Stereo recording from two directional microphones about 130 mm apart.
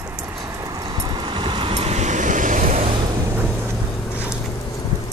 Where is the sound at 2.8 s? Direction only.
40° right (ahead or behind).